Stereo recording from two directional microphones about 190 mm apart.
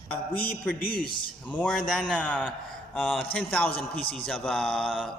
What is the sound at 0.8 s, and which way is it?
Speech, 50° left (ahead or behind).